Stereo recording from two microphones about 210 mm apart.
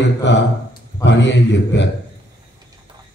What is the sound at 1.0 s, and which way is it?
Mantra, 55° left (ahead or behind).